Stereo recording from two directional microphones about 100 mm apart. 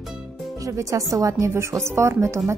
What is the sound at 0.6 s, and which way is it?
A woman's voice, 35° right (ahead or behind).